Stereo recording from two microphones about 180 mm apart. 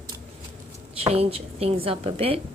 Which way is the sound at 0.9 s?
35° right (ahead or behind).